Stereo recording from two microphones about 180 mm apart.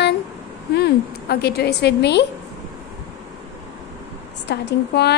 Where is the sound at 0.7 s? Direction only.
65° left (ahead or behind).